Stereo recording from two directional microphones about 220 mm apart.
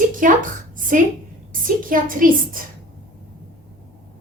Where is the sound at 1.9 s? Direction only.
40° right (ahead or behind).